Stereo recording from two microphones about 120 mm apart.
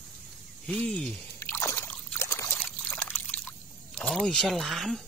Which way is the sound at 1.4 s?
20° left (ahead or behind).